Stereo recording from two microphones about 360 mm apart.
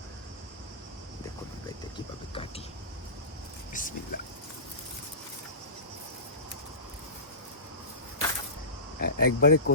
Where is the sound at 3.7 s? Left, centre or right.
Left.